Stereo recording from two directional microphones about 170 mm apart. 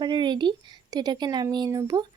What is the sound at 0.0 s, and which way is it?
Speech, 25° right (ahead or behind).